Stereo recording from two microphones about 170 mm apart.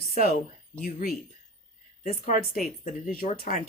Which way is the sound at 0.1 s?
50° left (ahead or behind).